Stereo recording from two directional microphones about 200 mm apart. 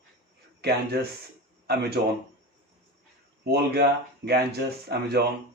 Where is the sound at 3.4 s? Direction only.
55° right (ahead or behind).